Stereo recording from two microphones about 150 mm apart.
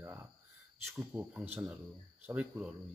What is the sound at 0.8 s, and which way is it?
Speech, 10° right (ahead or behind).